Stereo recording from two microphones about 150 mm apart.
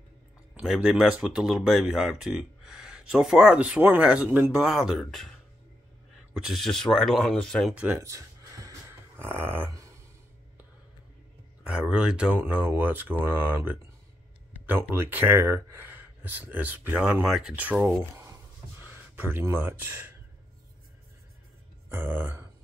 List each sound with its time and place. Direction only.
0.6 s speech: 5° right (ahead or behind)
6.3 s speech: centre (ahead or behind)
7.7 s a sound: 10° right (ahead or behind)
11.6 s speech: 5° right (ahead or behind)
21.8 s speech: 15° right (ahead or behind)